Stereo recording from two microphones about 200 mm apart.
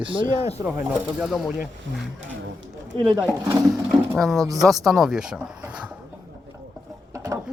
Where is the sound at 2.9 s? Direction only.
25° right (ahead or behind).